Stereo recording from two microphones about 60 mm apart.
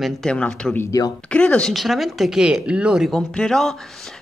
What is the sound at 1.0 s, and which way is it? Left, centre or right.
Speech, left.